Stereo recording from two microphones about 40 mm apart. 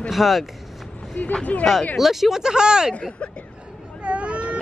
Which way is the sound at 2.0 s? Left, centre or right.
Centre.